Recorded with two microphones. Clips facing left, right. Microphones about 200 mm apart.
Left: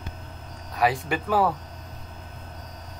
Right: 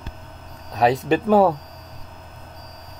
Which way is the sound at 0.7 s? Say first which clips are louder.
Right 6 dB; 25° right (ahead or behind).